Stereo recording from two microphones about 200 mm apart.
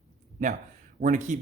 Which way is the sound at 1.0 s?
40° right (ahead or behind).